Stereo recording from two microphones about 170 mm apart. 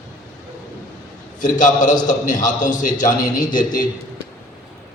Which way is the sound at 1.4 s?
50° left (ahead or behind).